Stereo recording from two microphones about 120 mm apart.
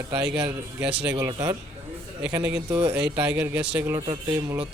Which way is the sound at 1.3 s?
30° right (ahead or behind).